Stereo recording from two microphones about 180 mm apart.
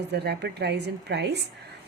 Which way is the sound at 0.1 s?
65° right (ahead or behind).